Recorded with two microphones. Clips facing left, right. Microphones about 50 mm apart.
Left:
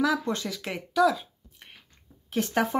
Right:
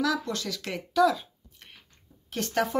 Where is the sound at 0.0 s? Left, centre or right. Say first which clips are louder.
Left 2 dB; left.